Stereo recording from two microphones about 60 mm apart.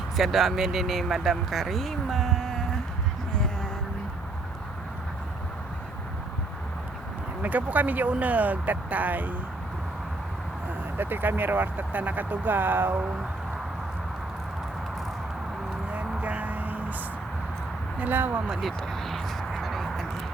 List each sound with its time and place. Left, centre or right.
0.2 s speech: centre
3.3 s a sound: centre
7.4 s speech: right
10.9 s speech: right
16.0 s music: right
18.0 s speech: right
18.6 s a sound: centre